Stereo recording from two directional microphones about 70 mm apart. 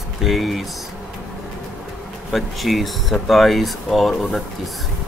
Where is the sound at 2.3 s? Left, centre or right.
Centre.